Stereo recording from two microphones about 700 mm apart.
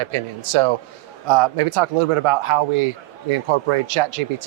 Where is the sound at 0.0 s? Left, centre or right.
Right.